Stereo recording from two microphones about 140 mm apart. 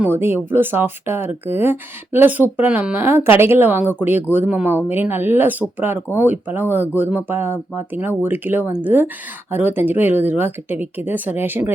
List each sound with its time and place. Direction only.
0.0 s speech: 15° right (ahead or behind)